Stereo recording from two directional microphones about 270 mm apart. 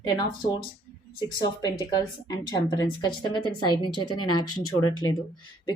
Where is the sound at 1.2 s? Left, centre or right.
Centre.